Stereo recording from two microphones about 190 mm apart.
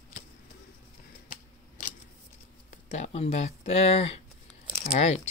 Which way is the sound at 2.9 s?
35° left (ahead or behind).